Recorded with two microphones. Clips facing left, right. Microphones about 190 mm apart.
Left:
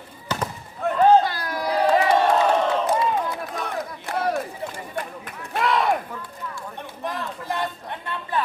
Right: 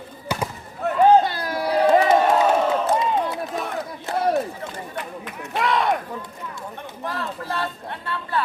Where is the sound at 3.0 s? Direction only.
25° right (ahead or behind).